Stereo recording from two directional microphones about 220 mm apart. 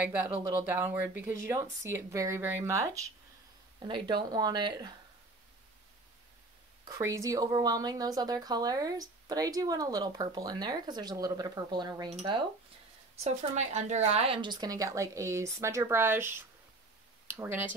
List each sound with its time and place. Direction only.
0.0 s a woman's voice: 10° right (ahead or behind)
6.8 s a woman's voice: 15° right (ahead or behind)